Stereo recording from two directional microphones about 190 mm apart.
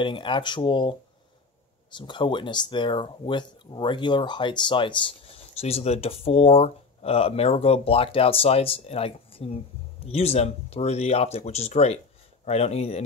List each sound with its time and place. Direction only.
0.0 s speech: 25° left (ahead or behind)